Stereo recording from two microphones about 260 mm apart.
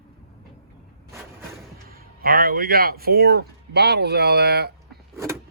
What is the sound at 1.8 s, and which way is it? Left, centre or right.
A man's voice, right.